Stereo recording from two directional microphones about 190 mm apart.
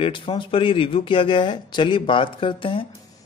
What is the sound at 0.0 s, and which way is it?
A man's voice, 25° left (ahead or behind).